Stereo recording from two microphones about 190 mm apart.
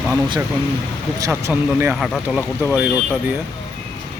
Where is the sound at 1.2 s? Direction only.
10° right (ahead or behind).